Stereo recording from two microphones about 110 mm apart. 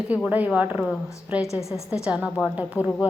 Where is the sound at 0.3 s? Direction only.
15° right (ahead or behind).